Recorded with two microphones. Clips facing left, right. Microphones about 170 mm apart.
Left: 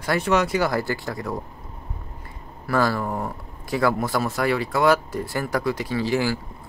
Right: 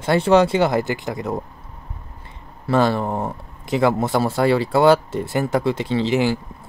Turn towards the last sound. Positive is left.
turn(degrees=-20)  # may be behind; listen again after turning